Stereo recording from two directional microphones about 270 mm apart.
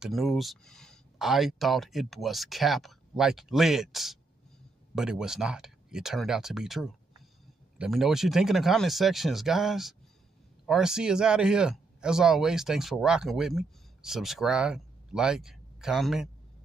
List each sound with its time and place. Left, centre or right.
0.0 s speech: centre